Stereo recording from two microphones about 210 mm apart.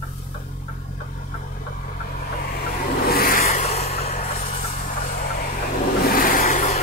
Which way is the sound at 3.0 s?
45° left (ahead or behind).